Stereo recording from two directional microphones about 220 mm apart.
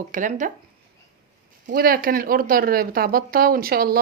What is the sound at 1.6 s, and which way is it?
A woman's voice, 40° right (ahead or behind).